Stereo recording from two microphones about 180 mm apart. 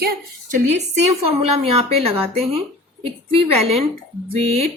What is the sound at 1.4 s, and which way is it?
A woman's voice, 35° right (ahead or behind).